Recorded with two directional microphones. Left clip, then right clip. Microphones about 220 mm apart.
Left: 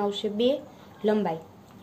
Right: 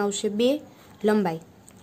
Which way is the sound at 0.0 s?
55° right (ahead or behind).